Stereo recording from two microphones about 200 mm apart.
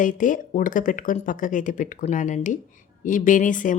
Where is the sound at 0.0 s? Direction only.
40° left (ahead or behind).